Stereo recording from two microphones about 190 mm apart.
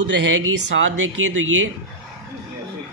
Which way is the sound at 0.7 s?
90° right.